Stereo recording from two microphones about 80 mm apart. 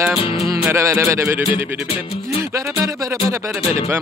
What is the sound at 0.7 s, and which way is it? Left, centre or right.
Music, right.